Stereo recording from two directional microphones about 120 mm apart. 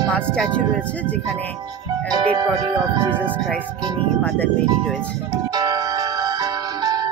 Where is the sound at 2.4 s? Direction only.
35° right (ahead or behind).